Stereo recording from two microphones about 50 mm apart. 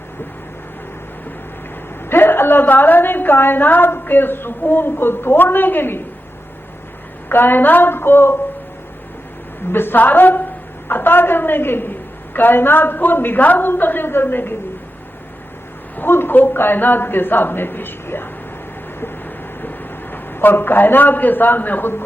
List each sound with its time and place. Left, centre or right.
2.0 s a woman's voice: left
7.3 s a woman's voice: left
9.7 s a woman's voice: left
16.0 s a woman's voice: left
19.6 s a man's voice: left